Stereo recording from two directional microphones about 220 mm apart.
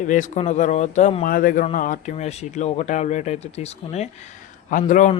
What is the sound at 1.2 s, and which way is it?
Speech, 40° left (ahead or behind).